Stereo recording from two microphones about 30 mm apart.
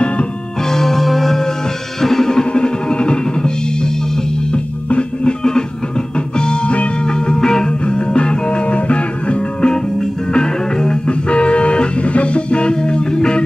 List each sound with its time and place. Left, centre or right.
0.7 s music: centre
2.5 s music: left
4.8 s music: left
6.1 s music: left
7.8 s music: left
8.6 s music: left
11.1 s music: left